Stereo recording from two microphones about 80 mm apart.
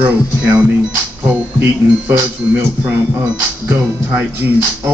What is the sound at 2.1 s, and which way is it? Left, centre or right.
Speech, right.